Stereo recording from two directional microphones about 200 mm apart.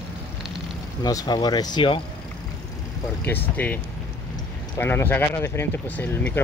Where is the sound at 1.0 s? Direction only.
20° left (ahead or behind).